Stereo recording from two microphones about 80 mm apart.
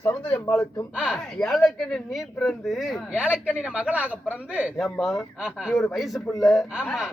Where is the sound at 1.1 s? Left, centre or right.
Centre.